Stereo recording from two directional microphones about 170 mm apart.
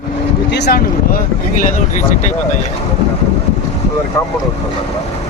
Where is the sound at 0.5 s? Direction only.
80° left.